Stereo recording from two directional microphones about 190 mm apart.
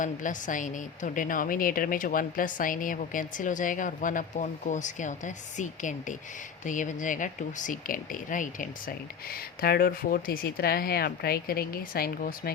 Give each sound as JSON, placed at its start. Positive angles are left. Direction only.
{"t": 0.0, "sound": "a woman's voice", "side_deg": 40}